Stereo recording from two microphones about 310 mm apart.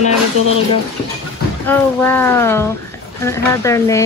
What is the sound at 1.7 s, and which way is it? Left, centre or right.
Speech, centre.